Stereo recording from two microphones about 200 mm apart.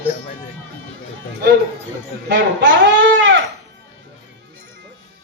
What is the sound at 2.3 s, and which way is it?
Goat, 65° right (ahead or behind).